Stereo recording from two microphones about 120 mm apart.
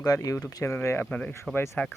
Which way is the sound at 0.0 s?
30° left (ahead or behind).